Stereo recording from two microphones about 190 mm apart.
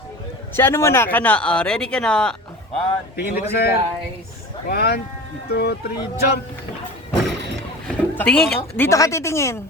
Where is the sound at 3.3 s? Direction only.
60° left (ahead or behind).